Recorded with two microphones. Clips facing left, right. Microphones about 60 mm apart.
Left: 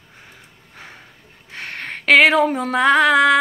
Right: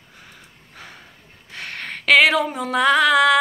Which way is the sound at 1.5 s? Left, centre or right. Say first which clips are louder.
Left 1 dB; left.